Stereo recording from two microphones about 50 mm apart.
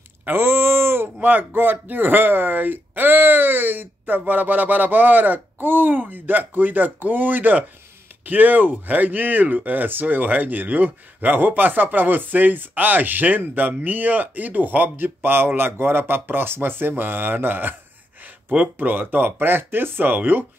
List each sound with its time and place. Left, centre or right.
0.2 s a sound: right
1.2 s speech: right
18.8 s speech: right